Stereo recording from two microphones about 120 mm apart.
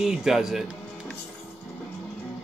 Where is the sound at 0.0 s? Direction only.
5° right (ahead or behind).